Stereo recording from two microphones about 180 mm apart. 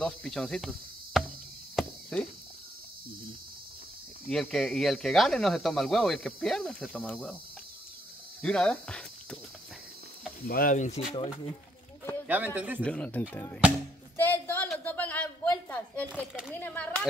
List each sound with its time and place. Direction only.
0.0 s speech: 5° left (ahead or behind)
1.8 s cricket: 5° left (ahead or behind)
4.3 s speech: 5° left (ahead or behind)
8.4 s speech: 5° left (ahead or behind)
10.4 s speech: 50° left (ahead or behind)
12.0 s a sound: 15° left (ahead or behind)
12.3 s speech: 10° right (ahead or behind)
12.8 s speech: 5° left (ahead or behind)
14.1 s music: 10° left (ahead or behind)
14.7 s a sound: 10° left (ahead or behind)
16.5 s speech: 10° left (ahead or behind)